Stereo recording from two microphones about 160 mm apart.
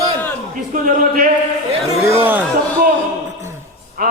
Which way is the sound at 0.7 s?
60° right (ahead or behind).